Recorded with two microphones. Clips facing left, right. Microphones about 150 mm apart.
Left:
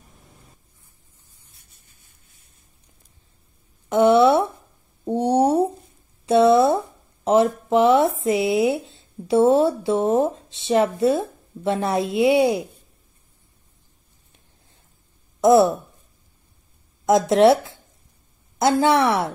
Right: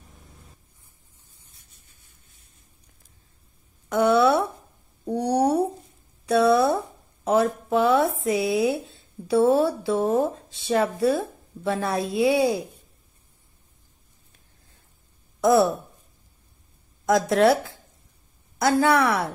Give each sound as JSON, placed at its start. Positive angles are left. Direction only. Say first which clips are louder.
{"t": 3.9, "sound": "a sound", "louder": "left 4 dB", "side_deg": 25}
{"t": 11.6, "sound": "speech", "louder": "left 3 dB", "side_deg": 25}
{"t": 15.4, "sound": "speech", "louder": "left 4 dB", "side_deg": 25}
{"t": 17.0, "sound": "speech", "louder": "left 4 dB", "side_deg": 25}